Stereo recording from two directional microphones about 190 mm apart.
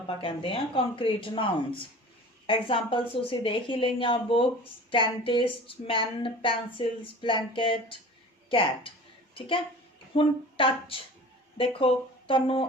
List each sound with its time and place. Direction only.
0.2 s speech: 30° left (ahead or behind)
2.5 s speech: 25° left (ahead or behind)